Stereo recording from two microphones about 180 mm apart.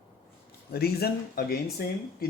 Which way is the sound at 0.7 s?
60° left (ahead or behind).